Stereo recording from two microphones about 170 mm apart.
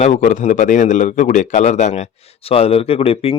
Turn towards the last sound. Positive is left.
turn(degrees=35)  # may be behind; listen again after turning